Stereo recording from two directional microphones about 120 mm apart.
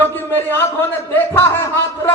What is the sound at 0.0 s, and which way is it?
Speech, 15° left (ahead or behind).